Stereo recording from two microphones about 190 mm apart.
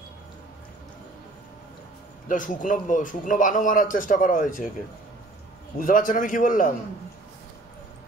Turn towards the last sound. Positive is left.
turn(degrees=45)  # may be behind; listen again after turning